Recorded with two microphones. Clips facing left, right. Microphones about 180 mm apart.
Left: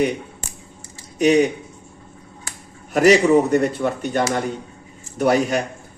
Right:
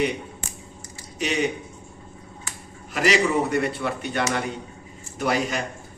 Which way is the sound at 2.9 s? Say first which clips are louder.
Left 8 dB; 45° left (ahead or behind).